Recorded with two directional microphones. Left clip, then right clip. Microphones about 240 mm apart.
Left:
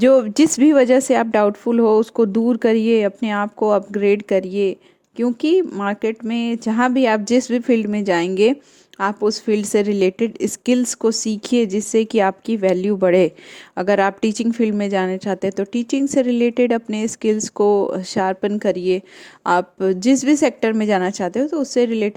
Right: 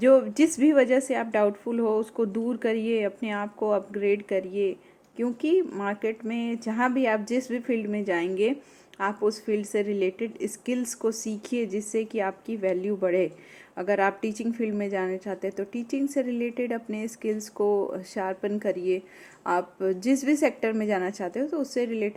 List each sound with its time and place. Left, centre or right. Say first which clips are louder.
0.0 s speech: left 6 dB; left
11.8 s speech: left 11 dB; left
15.7 s speech: left 10 dB; left